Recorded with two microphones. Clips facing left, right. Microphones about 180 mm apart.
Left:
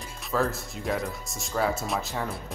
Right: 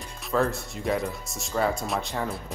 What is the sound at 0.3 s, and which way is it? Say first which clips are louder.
Speech: right 2 dB; centre (ahead or behind).